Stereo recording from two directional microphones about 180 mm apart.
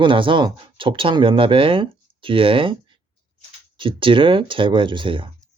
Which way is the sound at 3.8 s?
30° right (ahead or behind).